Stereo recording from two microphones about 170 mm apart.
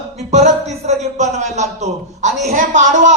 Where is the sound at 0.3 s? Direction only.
40° right (ahead or behind).